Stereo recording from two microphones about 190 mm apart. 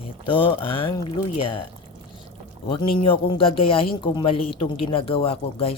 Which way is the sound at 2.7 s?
25° left (ahead or behind).